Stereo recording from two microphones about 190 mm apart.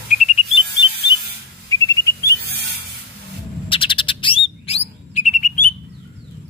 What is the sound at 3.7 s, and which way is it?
Bird, 25° left (ahead or behind).